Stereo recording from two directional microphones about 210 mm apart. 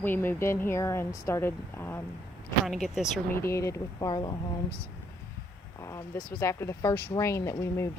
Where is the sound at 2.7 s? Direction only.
Centre (ahead or behind).